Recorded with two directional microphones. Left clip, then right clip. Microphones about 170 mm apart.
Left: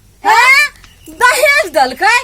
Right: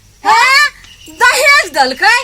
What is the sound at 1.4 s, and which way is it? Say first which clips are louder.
Speech: right 1 dB; 60° left (ahead or behind).